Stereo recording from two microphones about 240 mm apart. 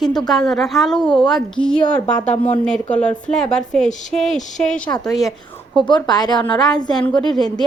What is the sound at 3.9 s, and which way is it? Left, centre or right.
Speech, left.